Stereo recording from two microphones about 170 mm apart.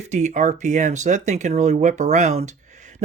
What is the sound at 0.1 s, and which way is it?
Speech, 45° right (ahead or behind).